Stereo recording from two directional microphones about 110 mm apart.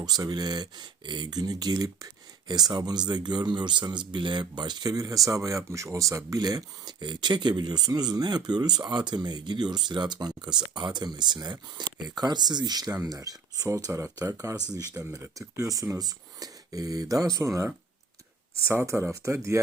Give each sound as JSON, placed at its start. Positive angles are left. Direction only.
{"t": 0.0, "sound": "speech", "side_deg": -35}
{"t": 18.7, "sound": "speech", "side_deg": -25}